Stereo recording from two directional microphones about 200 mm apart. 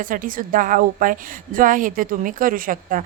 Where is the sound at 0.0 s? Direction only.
45° right (ahead or behind).